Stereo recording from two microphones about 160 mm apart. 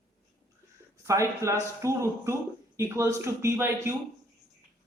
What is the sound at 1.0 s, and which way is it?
Speech, 20° right (ahead or behind).